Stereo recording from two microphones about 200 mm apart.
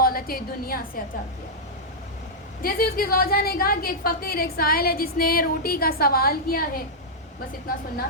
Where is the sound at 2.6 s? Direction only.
45° left (ahead or behind).